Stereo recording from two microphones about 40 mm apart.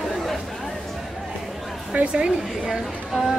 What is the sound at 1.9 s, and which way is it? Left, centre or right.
Speech, right.